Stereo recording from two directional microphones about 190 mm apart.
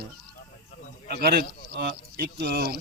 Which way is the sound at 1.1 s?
55° right (ahead or behind).